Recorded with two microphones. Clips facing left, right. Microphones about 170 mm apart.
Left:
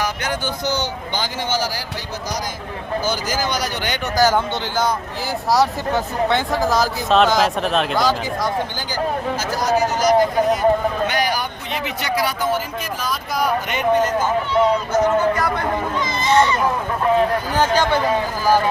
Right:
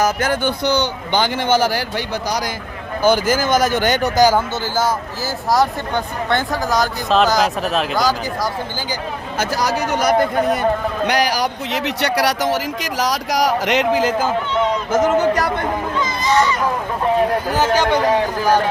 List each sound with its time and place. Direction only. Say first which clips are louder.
0.0 s a man's voice: right 6 dB; 50° right (ahead or behind)
3.0 s speech: right 9 dB; 55° right (ahead or behind)
4.2 s speech: right 1 dB; 10° right (ahead or behind)
9.4 s a man's voice: right 1 dB; 75° right (ahead or behind); by 10.6 s 60° right (ahead or behind)
11.0 s speech: right 3 dB; 80° right
16.2 s speech: left 1 dB; 30° left (ahead or behind)